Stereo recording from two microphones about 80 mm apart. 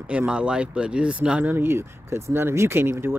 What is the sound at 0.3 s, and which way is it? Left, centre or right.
Speech, centre.